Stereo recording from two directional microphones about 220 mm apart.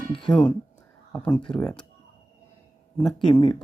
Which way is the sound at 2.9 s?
Centre (ahead or behind).